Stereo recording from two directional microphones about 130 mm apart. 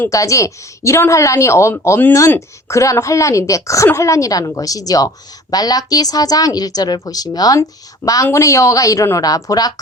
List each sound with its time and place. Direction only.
0.0 s a woman's voice: 25° left (ahead or behind)